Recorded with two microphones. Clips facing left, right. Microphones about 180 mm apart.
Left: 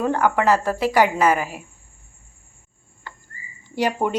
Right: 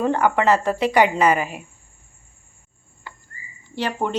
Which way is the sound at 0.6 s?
15° right (ahead or behind).